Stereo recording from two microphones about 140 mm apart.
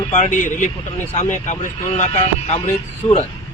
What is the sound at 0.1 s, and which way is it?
A man's voice, 60° left (ahead or behind).